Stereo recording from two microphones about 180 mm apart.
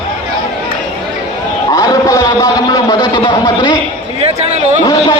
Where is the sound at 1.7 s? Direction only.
20° left (ahead or behind).